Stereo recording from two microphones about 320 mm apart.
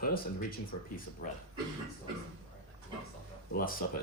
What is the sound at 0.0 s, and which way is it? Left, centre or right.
Speech, left.